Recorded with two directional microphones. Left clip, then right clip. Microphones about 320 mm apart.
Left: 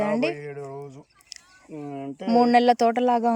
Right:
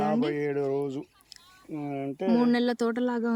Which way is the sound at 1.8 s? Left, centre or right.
Centre.